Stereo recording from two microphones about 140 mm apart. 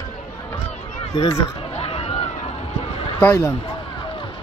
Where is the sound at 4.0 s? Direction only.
35° left (ahead or behind).